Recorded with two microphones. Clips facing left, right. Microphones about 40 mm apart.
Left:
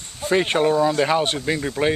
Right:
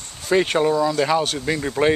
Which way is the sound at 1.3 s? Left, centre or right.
Centre.